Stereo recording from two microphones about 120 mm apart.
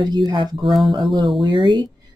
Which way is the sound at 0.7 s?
Centre (ahead or behind).